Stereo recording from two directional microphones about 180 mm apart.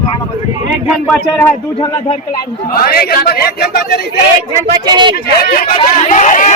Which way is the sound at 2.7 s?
55° left (ahead or behind).